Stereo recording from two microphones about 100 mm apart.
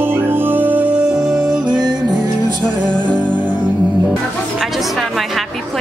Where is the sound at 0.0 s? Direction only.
20° right (ahead or behind).